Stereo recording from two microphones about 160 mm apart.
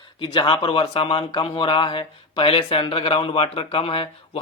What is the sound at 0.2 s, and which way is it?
Speech, 30° left (ahead or behind).